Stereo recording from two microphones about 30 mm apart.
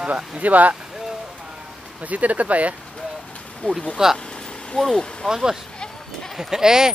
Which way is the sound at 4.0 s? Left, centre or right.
Right.